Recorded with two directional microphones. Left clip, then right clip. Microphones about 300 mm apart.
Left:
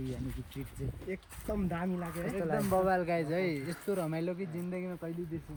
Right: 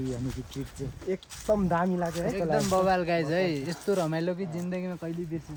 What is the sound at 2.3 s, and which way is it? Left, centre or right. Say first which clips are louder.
Speech: right 4 dB; right.